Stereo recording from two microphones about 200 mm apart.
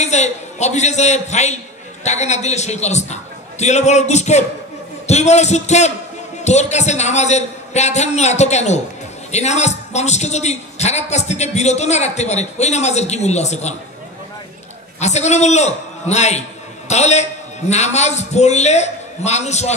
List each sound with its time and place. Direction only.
0.0 s a man's voice: 35° left (ahead or behind)
15.0 s a man's voice: 35° left (ahead or behind)